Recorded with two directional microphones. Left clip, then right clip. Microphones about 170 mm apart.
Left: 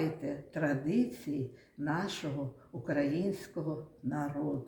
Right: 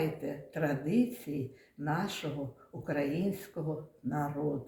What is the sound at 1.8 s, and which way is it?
Speech, 15° right (ahead or behind).